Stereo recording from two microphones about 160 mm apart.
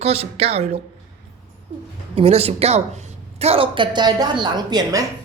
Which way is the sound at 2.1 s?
40° right (ahead or behind).